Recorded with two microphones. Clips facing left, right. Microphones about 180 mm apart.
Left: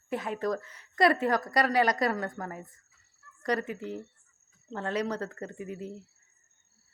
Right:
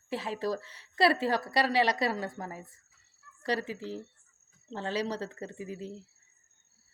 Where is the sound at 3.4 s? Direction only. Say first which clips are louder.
Left 2 dB; 30° right (ahead or behind).